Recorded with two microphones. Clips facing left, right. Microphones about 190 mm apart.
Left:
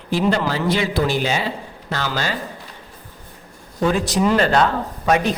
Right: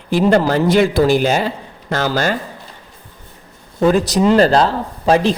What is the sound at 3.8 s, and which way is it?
Speech, 40° right (ahead or behind).